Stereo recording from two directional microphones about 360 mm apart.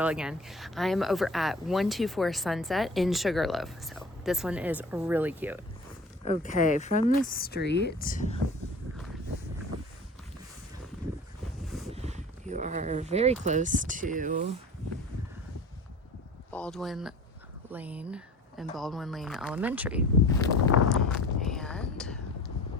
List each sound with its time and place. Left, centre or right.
0.0 s speech: centre
6.4 s speech: left
11.6 s wind noise: centre
11.9 s a sound: centre
13.4 s speech: centre
16.5 s speech: centre
20.4 s a sound: centre